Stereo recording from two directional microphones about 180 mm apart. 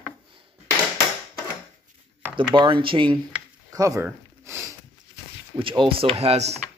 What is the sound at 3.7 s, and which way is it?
Sniff, 20° right (ahead or behind).